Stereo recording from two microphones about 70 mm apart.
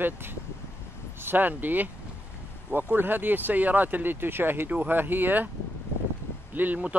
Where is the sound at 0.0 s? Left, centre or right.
Right.